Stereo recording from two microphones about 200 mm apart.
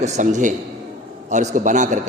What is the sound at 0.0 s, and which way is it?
A man's voice, 35° right (ahead or behind).